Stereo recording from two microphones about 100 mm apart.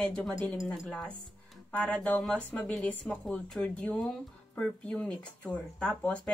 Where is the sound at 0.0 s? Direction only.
10° left (ahead or behind).